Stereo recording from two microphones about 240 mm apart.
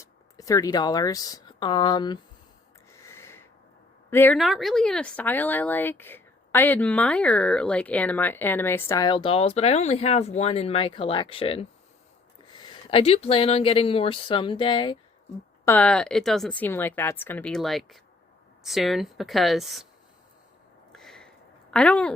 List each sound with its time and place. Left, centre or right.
0.0 s speech: centre
2.9 s a sound: centre
4.1 s speech: centre
15.6 s a woman's voice: centre
20.9 s a sound: centre
21.7 s speech: centre